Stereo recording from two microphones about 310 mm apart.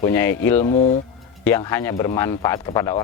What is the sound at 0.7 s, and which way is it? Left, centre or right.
Speech, left.